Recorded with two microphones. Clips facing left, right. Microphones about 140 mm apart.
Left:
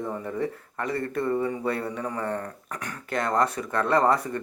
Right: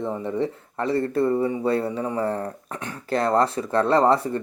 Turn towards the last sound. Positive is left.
turn(degrees=-30)  # may be behind; listen again after turning